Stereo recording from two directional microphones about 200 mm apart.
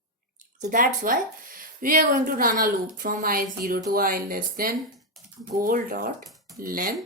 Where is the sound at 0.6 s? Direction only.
40° right (ahead or behind).